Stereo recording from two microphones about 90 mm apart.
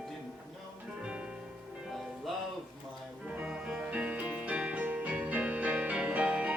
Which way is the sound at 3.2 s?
15° right (ahead or behind).